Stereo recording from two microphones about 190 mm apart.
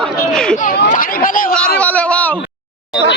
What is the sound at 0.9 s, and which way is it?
Chatter, 45° left (ahead or behind).